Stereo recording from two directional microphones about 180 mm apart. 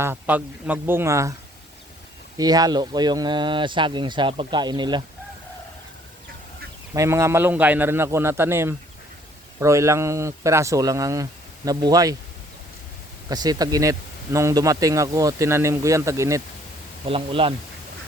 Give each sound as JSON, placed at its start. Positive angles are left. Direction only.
{"t": 0.0, "sound": "speech", "side_deg": -10}
{"t": 2.4, "sound": "speech", "side_deg": -20}
{"t": 6.9, "sound": "speech", "side_deg": -15}
{"t": 13.3, "sound": "speech", "side_deg": -20}
{"t": 17.1, "sound": "speech", "side_deg": -30}